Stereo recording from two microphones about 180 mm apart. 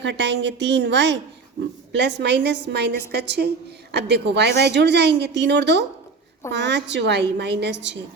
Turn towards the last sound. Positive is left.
turn(degrees=-75)  # may be behind; listen again after turning